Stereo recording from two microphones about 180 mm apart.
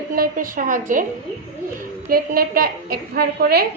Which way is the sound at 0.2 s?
50° right (ahead or behind).